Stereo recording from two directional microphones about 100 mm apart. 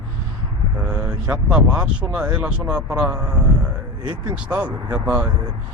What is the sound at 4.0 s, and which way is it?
Speech, 45° right (ahead or behind).